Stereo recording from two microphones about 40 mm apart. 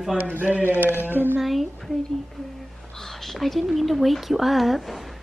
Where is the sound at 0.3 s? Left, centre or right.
Right.